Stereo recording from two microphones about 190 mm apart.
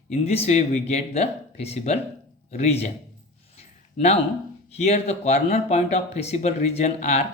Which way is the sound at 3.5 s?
35° left (ahead or behind).